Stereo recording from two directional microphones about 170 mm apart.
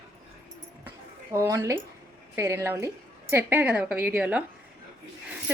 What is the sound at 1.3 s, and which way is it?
A woman's voice, 15° right (ahead or behind).